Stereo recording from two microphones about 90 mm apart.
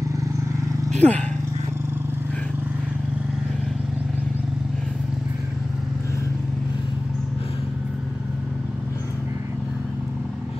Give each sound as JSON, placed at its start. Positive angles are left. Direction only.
{"t": 0.9, "sound": "speech", "side_deg": 15}